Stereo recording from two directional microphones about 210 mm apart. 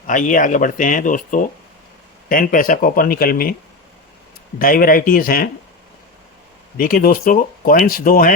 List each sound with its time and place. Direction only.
0.1 s speech: 40° left (ahead or behind)
4.6 s speech: 40° left (ahead or behind)
6.7 s speech: 45° left (ahead or behind)